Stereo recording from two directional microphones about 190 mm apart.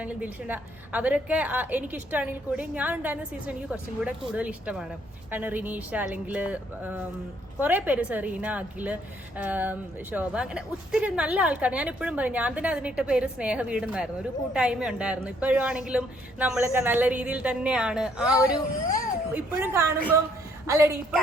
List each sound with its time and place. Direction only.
0.0 s a woman's voice: 10° right (ahead or behind)